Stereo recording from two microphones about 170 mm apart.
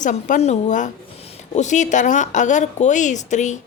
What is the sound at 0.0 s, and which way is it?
A woman's voice, 45° left (ahead or behind).